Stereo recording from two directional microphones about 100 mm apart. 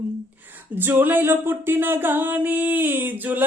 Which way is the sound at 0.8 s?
20° right (ahead or behind).